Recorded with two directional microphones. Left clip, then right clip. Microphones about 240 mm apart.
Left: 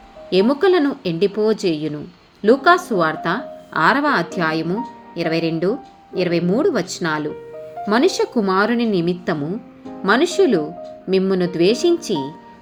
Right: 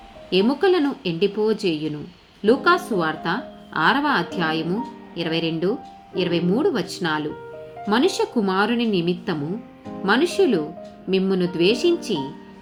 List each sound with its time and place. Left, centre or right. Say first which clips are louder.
0.3 s a woman's voice: left 3 dB; centre